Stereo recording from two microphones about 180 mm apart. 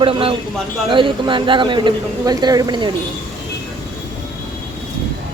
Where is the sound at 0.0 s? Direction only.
30° right (ahead or behind).